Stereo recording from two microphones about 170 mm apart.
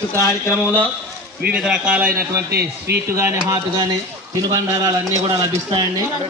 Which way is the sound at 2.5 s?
70° right (ahead or behind).